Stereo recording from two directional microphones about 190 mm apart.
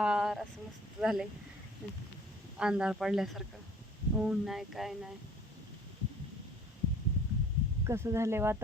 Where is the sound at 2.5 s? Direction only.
5° right (ahead or behind).